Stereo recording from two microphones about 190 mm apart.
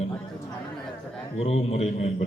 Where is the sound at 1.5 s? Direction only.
35° left (ahead or behind).